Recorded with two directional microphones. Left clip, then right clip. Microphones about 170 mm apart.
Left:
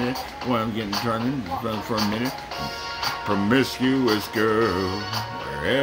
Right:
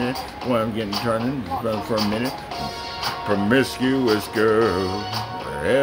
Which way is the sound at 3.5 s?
15° left (ahead or behind).